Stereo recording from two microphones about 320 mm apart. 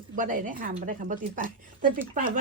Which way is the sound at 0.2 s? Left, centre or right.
Right.